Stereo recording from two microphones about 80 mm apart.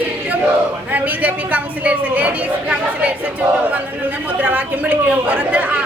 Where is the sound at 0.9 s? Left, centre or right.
Centre.